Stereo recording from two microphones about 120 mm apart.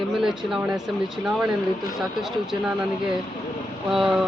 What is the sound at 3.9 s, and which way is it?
Speech, 5° right (ahead or behind).